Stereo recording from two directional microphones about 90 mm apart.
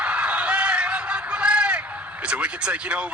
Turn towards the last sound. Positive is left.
turn(degrees=-15)  # may be behind; listen again after turning